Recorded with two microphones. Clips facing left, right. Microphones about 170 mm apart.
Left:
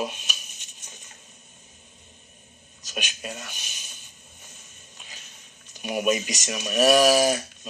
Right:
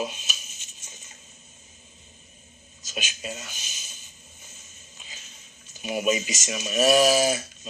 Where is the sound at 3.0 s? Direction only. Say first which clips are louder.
Even; 60° left (ahead or behind).